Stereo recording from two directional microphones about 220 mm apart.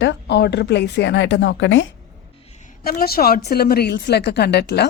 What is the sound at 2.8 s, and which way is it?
A woman's voice, 45° left (ahead or behind).